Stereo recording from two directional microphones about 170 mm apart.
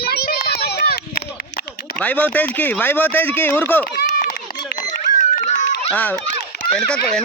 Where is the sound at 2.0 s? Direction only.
10° left (ahead or behind).